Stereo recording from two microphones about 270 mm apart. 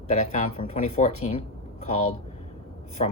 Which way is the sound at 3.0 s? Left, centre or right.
Left.